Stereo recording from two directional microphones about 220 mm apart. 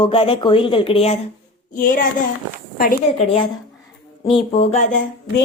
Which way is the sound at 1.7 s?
40° left (ahead or behind).